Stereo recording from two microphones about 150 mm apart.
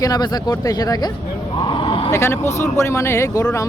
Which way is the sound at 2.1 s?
20° left (ahead or behind).